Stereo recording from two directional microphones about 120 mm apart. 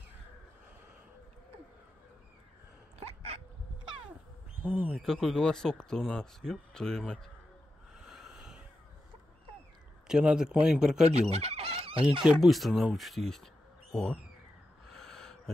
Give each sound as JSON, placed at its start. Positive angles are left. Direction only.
{"t": 3.1, "sound": "hiccup", "side_deg": -60}
{"t": 4.6, "sound": "a man's voice", "side_deg": -15}
{"t": 4.9, "sound": "speech", "side_deg": 0}
{"t": 8.1, "sound": "a sound", "side_deg": -5}
{"t": 10.0, "sound": "a man's voice", "side_deg": -5}
{"t": 11.1, "sound": "fowl", "side_deg": -60}
{"t": 12.2, "sound": "speech", "side_deg": -5}
{"t": 14.9, "sound": "a sound", "side_deg": 5}